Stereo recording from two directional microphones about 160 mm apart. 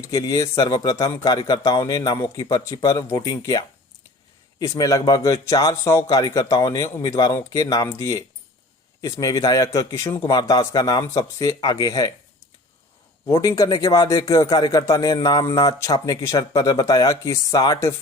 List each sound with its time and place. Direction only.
0.0 s speech: 20° left (ahead or behind)
4.6 s speech: 20° left (ahead or behind)
13.4 s speech: 20° left (ahead or behind)